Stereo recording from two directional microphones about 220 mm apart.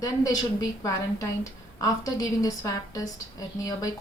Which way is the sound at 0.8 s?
15° left (ahead or behind).